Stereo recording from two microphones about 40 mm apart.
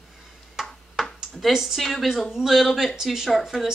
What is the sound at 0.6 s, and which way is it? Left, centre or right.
Ping, centre.